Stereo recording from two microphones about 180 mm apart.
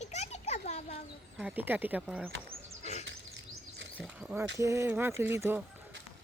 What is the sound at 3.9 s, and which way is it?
Speech, 5° right (ahead or behind).